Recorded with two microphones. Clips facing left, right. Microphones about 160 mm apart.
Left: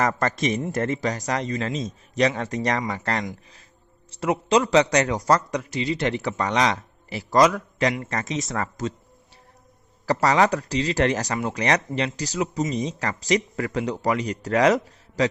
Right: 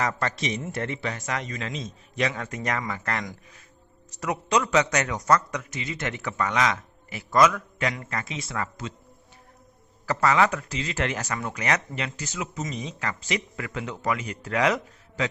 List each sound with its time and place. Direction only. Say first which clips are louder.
0.0 s a man's voice: left 5 dB; 45° left (ahead or behind)
10.1 s speech: left 3 dB; 35° left (ahead or behind)